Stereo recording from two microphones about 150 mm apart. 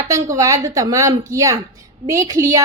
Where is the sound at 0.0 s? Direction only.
20° right (ahead or behind).